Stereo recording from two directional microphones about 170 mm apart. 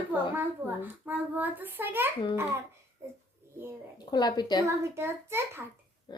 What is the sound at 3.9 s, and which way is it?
Speech, 25° left (ahead or behind).